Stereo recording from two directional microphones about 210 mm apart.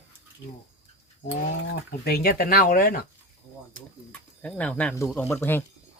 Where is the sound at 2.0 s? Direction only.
50° left (ahead or behind).